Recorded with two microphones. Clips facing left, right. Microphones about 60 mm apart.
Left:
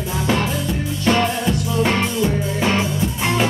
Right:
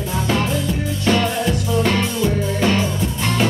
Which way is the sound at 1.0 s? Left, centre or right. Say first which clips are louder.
Even; left.